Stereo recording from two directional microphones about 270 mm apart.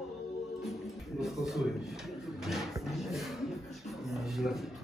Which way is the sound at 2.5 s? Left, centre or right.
Centre.